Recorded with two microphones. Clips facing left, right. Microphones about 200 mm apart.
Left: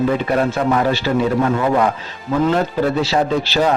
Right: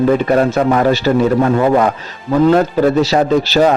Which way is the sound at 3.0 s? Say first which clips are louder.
Right 5 dB; 40° right (ahead or behind).